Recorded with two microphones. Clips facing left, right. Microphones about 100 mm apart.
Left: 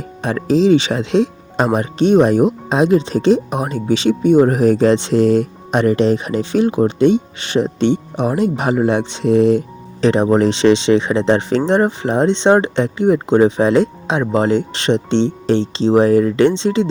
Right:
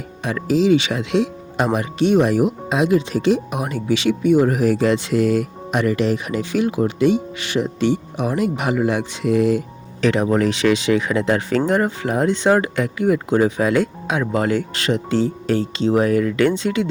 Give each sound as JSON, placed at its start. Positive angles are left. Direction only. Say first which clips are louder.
{"t": 0.2, "sound": "speech", "louder": "left 4 dB", "side_deg": 35}